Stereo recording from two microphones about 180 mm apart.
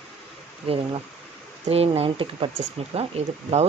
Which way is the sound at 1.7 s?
35° right (ahead or behind).